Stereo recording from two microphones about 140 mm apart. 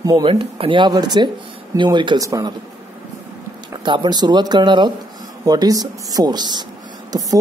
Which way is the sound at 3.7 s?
30° right (ahead or behind).